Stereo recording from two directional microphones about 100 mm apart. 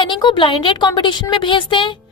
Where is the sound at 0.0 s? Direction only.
50° left (ahead or behind).